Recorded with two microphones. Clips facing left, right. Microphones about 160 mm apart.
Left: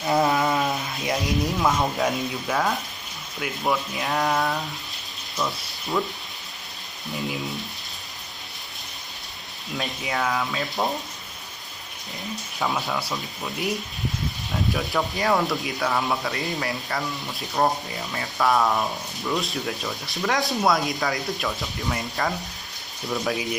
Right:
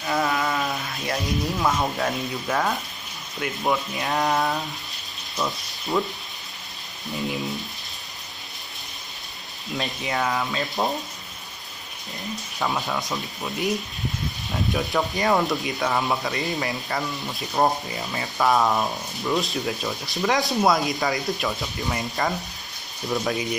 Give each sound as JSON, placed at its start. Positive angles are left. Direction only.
{"t": 0.0, "sound": "mantra", "side_deg": 20}
{"t": 1.6, "sound": "speech", "side_deg": 0}
{"t": 9.8, "sound": "speech", "side_deg": 0}
{"t": 12.5, "sound": "speech", "side_deg": 0}